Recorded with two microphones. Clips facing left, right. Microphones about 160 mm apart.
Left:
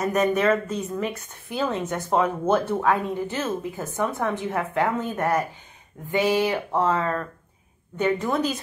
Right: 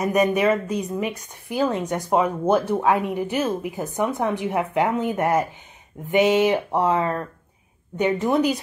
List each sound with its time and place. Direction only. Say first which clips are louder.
0.0 s a woman's voice: right 2 dB; 15° right (ahead or behind)